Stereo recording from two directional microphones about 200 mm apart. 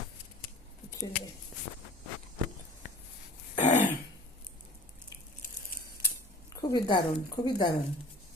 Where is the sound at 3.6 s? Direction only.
35° left (ahead or behind).